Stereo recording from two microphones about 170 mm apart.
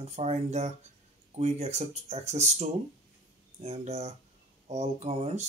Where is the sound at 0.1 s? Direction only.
40° right (ahead or behind).